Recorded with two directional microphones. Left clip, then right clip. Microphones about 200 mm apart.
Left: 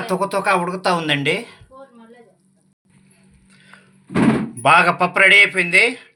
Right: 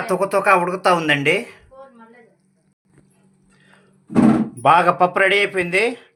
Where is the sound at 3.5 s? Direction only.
10° right (ahead or behind).